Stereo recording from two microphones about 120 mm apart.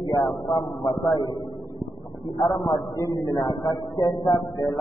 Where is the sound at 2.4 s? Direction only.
45° left (ahead or behind).